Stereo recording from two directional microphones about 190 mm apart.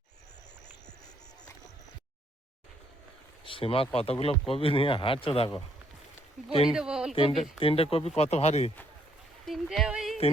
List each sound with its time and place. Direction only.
3.4 s speech: 30° left (ahead or behind)
6.6 s speech: 5° right (ahead or behind)
7.2 s speech: 30° left (ahead or behind)
9.5 s speech: centre (ahead or behind)